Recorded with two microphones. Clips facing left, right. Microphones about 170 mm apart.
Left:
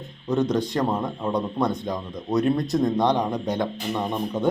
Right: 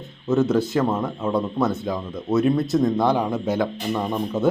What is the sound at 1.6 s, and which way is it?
Speech, 5° right (ahead or behind).